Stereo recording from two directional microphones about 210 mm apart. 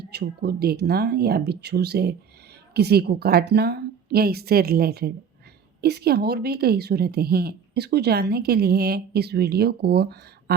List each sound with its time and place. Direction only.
0.0 s speech: 50° right (ahead or behind)